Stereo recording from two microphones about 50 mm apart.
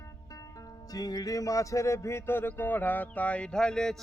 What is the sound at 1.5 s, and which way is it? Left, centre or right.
Music, left.